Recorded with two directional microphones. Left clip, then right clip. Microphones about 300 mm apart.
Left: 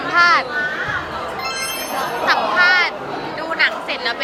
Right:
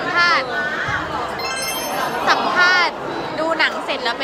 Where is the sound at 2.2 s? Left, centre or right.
Centre.